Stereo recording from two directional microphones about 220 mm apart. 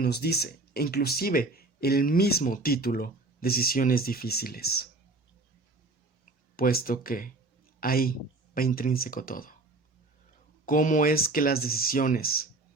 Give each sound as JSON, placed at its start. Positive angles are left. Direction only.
{"t": 0.0, "sound": "speech", "side_deg": 45}
{"t": 6.6, "sound": "a man's voice", "side_deg": 40}
{"t": 10.7, "sound": "speech", "side_deg": 35}